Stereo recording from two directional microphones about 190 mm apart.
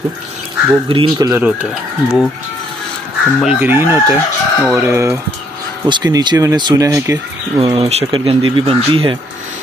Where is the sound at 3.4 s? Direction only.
10° right (ahead or behind).